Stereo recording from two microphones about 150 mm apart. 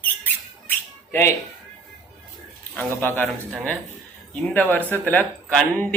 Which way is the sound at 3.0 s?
15° left (ahead or behind).